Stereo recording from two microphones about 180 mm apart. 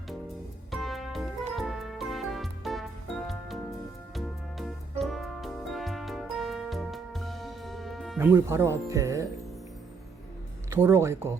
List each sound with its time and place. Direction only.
0.7 s music: centre (ahead or behind)
8.2 s speech: 15° right (ahead or behind)
10.7 s speech: 15° right (ahead or behind)